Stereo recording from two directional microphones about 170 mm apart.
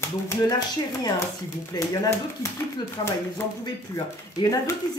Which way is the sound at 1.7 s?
20° left (ahead or behind).